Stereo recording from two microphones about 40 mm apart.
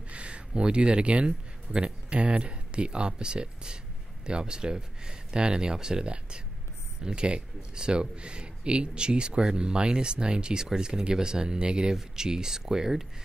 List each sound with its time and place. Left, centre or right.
0.1 s speech: right; by 13.0 s centre